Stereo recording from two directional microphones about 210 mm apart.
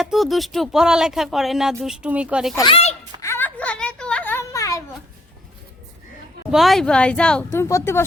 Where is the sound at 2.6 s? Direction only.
25° left (ahead or behind).